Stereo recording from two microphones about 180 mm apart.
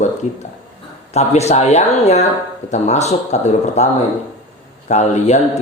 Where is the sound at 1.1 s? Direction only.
35° left (ahead or behind).